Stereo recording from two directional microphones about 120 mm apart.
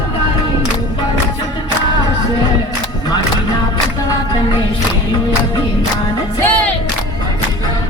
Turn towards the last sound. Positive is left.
turn(degrees=15)  # may be behind; listen again after turning